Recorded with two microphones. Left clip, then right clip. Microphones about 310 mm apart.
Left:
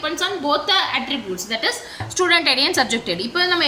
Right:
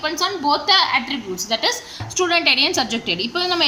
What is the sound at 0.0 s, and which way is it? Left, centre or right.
A woman's voice, centre.